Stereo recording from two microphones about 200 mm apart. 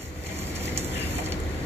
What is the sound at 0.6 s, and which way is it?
Vehicle, 10° right (ahead or behind).